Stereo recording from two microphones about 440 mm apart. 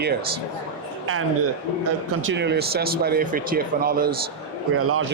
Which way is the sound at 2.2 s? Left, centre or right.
Right.